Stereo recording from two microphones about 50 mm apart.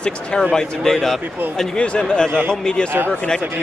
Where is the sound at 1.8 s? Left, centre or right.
Centre.